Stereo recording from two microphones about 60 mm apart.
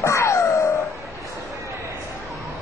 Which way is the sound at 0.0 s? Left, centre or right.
Left.